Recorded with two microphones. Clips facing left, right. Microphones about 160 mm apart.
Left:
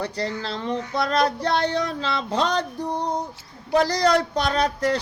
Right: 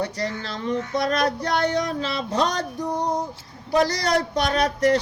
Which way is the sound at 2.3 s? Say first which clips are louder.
Even; 30° left (ahead or behind).